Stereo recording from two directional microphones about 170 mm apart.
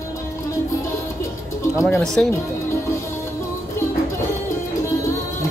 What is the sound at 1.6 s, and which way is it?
Music, 15° left (ahead or behind).